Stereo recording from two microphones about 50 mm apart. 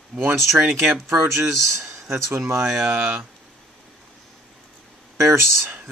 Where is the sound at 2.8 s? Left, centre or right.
Right.